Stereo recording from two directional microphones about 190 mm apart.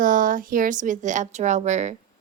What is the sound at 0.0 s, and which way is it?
Speech, 45° right (ahead or behind).